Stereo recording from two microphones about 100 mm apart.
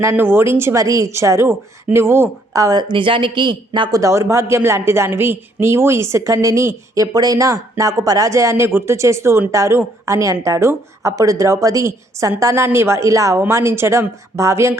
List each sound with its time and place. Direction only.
0.0 s a woman's voice: 25° right (ahead or behind)
2.8 s a man's voice: 55° right (ahead or behind); by 14.8 s 25° right (ahead or behind)